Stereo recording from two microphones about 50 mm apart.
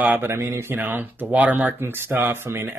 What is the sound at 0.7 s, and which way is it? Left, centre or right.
Speech, right.